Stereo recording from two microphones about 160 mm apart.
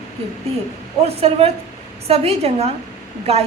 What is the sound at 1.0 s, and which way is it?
A woman's voice, 40° right (ahead or behind).